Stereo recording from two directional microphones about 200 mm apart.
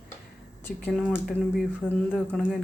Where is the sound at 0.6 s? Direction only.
5° left (ahead or behind).